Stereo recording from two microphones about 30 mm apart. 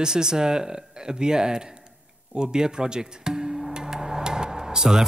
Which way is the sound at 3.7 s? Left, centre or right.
Right.